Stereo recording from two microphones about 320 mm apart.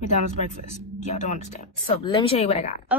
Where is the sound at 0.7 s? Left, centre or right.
Left.